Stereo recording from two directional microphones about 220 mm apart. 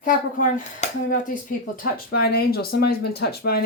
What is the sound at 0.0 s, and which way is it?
Speech, 35° left (ahead or behind).